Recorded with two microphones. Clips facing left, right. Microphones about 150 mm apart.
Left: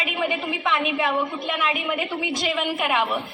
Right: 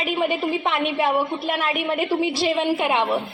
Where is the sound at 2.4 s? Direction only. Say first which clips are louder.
Right 4 dB; 30° right (ahead or behind).